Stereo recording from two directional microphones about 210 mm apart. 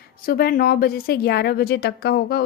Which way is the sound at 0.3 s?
45° left (ahead or behind).